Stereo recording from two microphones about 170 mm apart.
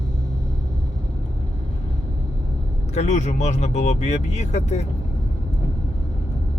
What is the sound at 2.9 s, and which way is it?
Speech, 40° left (ahead or behind).